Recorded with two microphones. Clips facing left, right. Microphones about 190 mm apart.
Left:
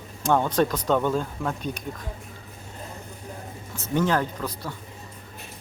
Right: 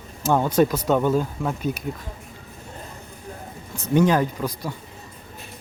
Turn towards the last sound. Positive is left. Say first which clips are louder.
# right 5 dB
turn(degrees=-15)  # may be behind; listen again after turning